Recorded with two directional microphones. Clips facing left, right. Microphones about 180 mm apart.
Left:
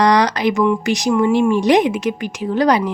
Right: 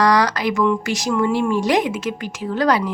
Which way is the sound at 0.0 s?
20° left (ahead or behind).